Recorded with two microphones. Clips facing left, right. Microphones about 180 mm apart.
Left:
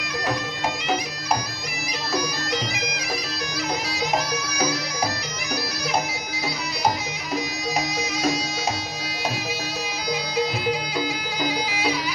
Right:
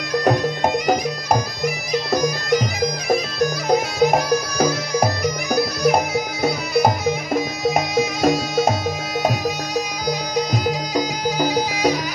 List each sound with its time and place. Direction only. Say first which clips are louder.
0.1 s bagpipes: right 9 dB; 50° right (ahead or behind)
2.1 s bagpipes: right 6 dB; 50° right (ahead or behind)
10.0 s music: left 1 dB; 45° right (ahead or behind)